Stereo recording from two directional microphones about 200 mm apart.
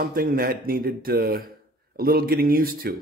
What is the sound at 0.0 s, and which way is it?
A man's voice, 45° right (ahead or behind).